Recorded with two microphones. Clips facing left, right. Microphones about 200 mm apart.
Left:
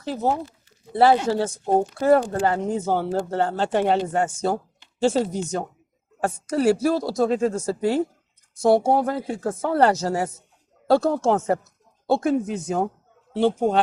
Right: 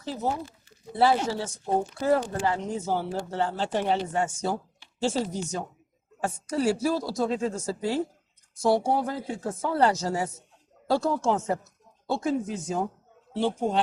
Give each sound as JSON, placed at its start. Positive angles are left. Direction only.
{"t": 0.9, "sound": "a woman's voice", "side_deg": 60}